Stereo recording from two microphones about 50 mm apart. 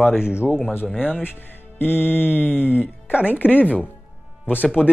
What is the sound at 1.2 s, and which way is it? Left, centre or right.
Speech, left.